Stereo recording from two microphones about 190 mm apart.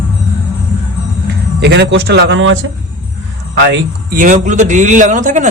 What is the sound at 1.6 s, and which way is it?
Speech, 65° right (ahead or behind).